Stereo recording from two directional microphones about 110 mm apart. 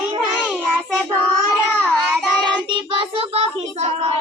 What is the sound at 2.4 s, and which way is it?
Child singing, 45° right (ahead or behind).